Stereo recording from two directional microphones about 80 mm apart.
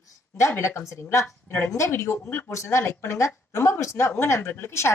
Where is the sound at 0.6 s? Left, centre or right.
Left.